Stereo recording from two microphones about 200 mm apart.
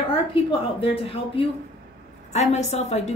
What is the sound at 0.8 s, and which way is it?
A woman's voice, 25° left (ahead or behind).